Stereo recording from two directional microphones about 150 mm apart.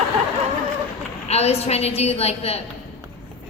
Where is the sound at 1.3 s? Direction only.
45° left (ahead or behind).